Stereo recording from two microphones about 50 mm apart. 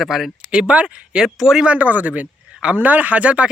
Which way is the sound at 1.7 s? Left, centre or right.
Right.